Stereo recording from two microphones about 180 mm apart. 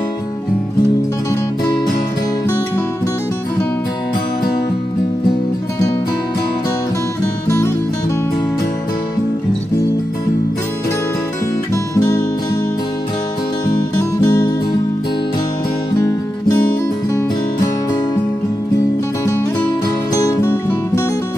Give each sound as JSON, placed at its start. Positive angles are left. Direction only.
{"t": 7.4, "sound": "music", "side_deg": 15}
{"t": 11.7, "sound": "music", "side_deg": 15}
{"t": 14.2, "sound": "music", "side_deg": 20}
{"t": 16.0, "sound": "music", "side_deg": 15}
{"t": 20.2, "sound": "music", "side_deg": 15}